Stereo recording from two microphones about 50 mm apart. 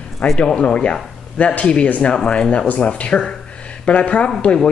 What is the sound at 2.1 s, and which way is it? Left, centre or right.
Speech, centre.